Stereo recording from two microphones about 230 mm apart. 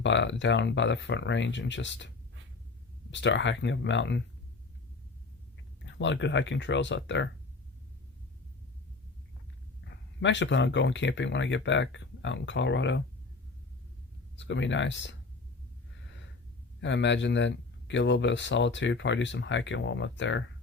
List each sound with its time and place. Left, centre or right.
0.0 s speech: left
3.1 s speech: left
5.8 s speech: left
9.8 s speech: left
14.3 s speech: left
16.8 s speech: left